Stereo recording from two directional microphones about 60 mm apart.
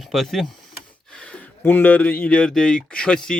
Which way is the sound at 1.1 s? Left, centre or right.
Centre.